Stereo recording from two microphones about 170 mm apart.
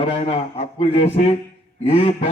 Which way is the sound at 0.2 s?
40° left (ahead or behind).